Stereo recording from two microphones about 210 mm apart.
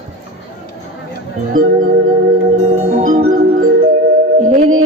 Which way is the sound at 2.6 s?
30° right (ahead or behind).